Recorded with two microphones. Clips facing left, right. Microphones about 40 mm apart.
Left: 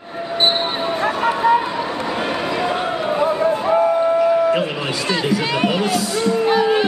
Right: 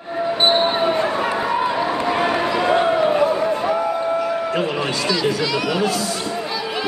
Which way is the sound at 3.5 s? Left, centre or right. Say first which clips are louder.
Left 3 dB; left.